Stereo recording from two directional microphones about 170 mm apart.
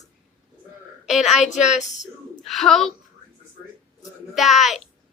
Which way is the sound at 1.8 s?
45° left (ahead or behind).